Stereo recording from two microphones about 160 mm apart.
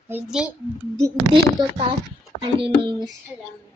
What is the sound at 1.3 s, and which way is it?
Speech, 30° right (ahead or behind).